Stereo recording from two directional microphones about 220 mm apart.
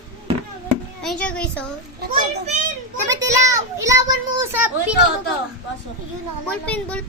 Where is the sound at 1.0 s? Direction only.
5° left (ahead or behind).